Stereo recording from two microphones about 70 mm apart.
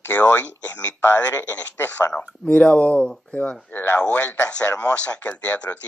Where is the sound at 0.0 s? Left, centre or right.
Left.